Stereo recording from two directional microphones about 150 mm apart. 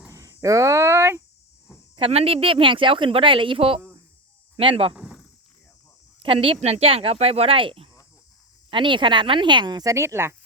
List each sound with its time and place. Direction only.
0.1 s a sound: 20° right (ahead or behind)
2.0 s speech: 40° right (ahead or behind)
4.9 s speech: 5° right (ahead or behind)
6.1 s speech: 40° right (ahead or behind); by 10.3 s 15° right (ahead or behind)